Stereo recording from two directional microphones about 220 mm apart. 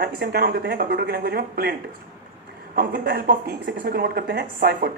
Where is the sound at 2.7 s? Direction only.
45° right (ahead or behind).